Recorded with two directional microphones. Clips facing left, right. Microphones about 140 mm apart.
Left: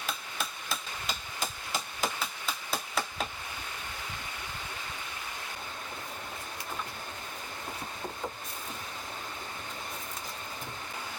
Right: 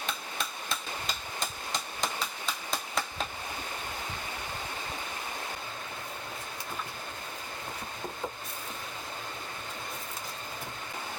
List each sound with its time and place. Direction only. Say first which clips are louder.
0.0 s hammer: right 1 dB; 5° left (ahead or behind)